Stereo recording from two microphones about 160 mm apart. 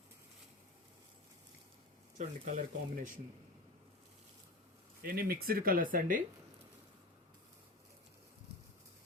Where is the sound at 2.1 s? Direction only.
55° right (ahead or behind).